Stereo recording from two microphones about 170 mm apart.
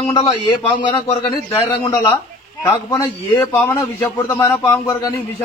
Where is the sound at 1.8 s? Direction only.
15° left (ahead or behind).